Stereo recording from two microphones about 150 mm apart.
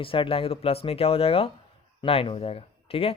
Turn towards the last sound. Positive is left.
turn(degrees=40)  # may be behind; listen again after turning